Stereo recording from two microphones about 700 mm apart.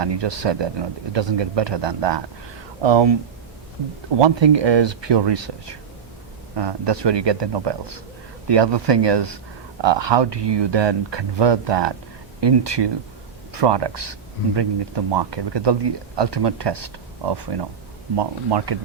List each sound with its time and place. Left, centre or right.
0.0 s speech: right
4.2 s speech: right